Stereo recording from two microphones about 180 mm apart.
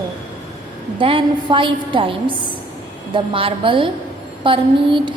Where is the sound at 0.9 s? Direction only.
30° right (ahead or behind).